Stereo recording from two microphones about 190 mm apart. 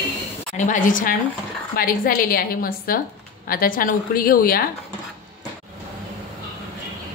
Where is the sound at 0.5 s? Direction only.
40° left (ahead or behind).